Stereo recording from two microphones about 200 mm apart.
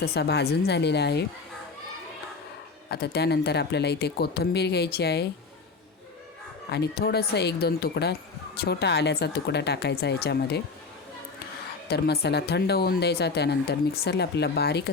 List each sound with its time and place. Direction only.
0.0 s speech: 55° left (ahead or behind)
2.9 s speech: 55° left (ahead or behind)
6.7 s speech: 55° left (ahead or behind)
11.9 s speech: 55° left (ahead or behind)